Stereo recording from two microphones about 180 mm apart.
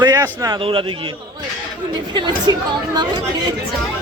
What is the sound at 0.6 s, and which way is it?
Speech, 30° right (ahead or behind).